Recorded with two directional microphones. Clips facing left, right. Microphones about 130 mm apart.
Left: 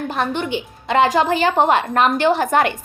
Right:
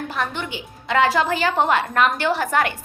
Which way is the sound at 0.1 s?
25° left (ahead or behind).